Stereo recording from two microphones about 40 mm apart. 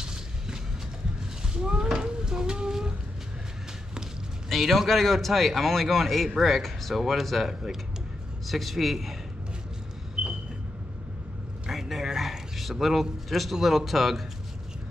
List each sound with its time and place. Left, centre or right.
0.0 s vehicle: centre
1.5 s a sound: centre
4.5 s a man's voice: centre
11.7 s speech: centre